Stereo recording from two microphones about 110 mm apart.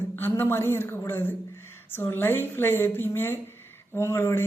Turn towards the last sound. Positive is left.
turn(degrees=25)  # may be behind; listen again after turning